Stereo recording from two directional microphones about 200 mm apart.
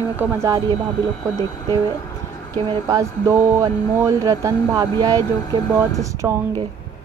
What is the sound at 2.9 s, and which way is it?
Speech, 15° right (ahead or behind).